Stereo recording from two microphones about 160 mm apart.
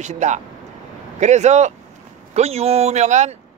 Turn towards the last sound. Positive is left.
turn(degrees=-45)  # may be behind; listen again after turning